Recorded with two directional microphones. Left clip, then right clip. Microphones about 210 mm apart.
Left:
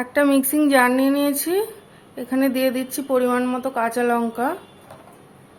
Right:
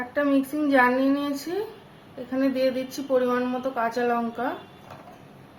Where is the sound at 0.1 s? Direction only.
45° left (ahead or behind).